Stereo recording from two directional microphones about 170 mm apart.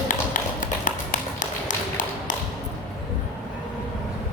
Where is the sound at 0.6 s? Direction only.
50° left (ahead or behind).